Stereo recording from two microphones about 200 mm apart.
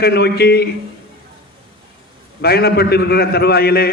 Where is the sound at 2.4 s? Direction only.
50° left (ahead or behind).